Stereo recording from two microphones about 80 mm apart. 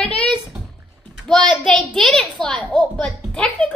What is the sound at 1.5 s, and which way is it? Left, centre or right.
A child's voice, centre.